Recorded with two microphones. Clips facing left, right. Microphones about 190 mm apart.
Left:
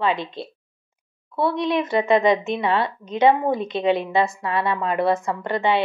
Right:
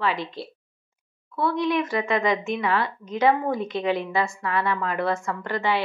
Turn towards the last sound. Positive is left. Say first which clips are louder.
# left 4 dB
turn(degrees=20)  # may be behind; listen again after turning